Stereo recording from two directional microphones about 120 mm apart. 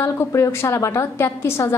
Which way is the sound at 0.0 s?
25° left (ahead or behind).